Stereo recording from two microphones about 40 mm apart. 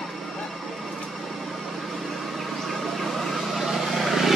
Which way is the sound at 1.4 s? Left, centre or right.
Centre.